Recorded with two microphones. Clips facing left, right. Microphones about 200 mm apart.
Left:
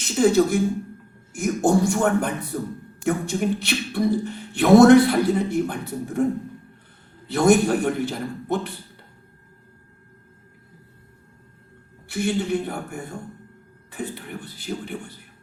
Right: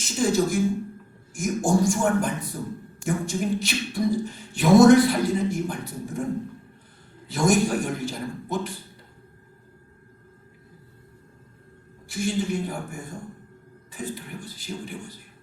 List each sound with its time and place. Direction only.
0.2 s speech: 60° left (ahead or behind)
7.3 s speech: 60° left (ahead or behind)
12.0 s speech: 60° left (ahead or behind)